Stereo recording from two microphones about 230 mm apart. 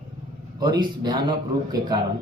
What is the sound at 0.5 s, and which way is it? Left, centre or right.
Speech, centre.